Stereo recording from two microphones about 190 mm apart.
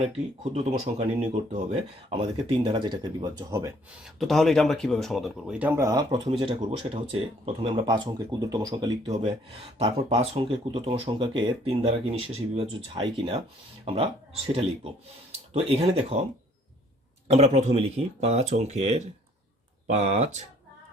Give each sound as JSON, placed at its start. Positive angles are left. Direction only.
{"t": 0.5, "sound": "speech", "side_deg": -35}
{"t": 4.0, "sound": "speech", "side_deg": 0}
{"t": 9.1, "sound": "speech", "side_deg": -30}
{"t": 17.3, "sound": "speech", "side_deg": -35}